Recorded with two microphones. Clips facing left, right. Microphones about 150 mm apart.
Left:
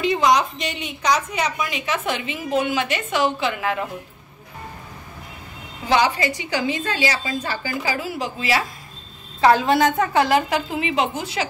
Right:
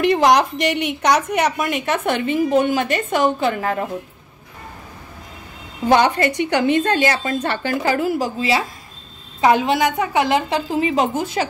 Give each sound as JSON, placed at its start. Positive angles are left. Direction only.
{"t": 0.0, "sound": "a woman's voice", "side_deg": -65}
{"t": 5.9, "sound": "a woman's voice", "side_deg": -55}
{"t": 8.4, "sound": "a woman's voice", "side_deg": -25}
{"t": 10.7, "sound": "a woman's voice", "side_deg": -40}